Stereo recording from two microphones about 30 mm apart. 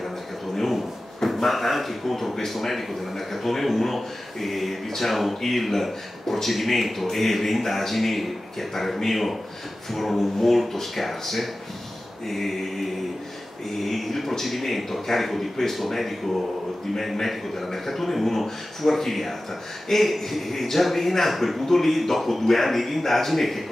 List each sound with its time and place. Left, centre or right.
0.6 s a sound: centre
1.2 s speech: centre
12.3 s mantra: centre
13.7 s speech: centre